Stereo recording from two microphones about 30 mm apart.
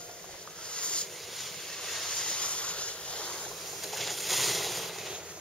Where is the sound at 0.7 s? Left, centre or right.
Left.